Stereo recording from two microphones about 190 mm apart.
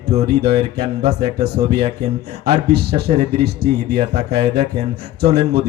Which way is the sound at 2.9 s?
35° right (ahead or behind).